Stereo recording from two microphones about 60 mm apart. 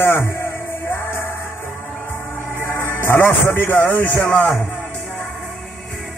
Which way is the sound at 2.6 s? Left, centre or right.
Left.